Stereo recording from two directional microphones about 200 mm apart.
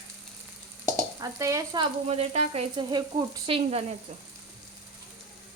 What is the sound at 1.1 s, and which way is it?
Speech, 15° right (ahead or behind).